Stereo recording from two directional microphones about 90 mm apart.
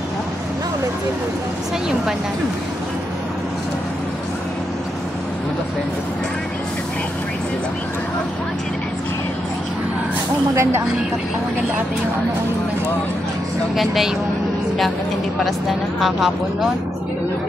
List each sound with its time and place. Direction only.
10.5 s speech: 30° right (ahead or behind)
13.7 s speech: centre (ahead or behind)